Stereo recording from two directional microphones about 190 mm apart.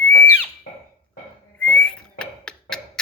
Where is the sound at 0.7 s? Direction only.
40° left (ahead or behind).